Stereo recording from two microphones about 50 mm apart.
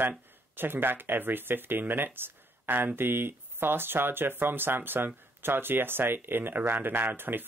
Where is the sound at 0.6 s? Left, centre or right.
Right.